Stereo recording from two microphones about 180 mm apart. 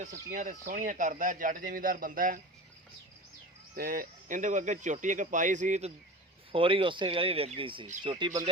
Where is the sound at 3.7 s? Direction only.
50° right (ahead or behind).